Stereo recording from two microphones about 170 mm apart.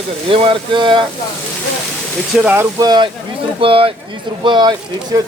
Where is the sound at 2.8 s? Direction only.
25° right (ahead or behind).